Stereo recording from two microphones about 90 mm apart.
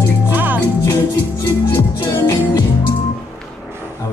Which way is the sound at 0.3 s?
20° right (ahead or behind).